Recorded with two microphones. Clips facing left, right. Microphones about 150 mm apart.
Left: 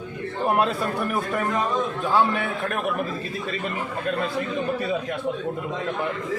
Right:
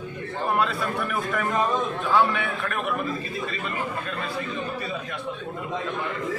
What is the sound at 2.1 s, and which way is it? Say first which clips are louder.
Speech: even; 40° left (ahead or behind).